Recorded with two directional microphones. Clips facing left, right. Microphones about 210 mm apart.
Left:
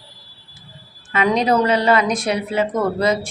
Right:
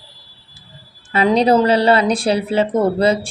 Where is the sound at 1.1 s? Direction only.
35° right (ahead or behind).